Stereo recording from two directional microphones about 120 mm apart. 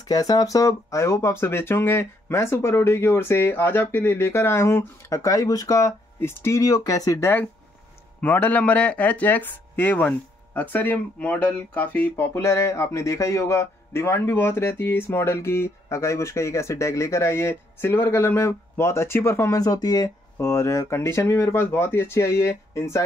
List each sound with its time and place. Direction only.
0.0 s speech: 30° left (ahead or behind)